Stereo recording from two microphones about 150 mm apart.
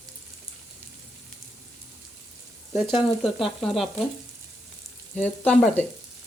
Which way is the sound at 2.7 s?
Centre (ahead or behind).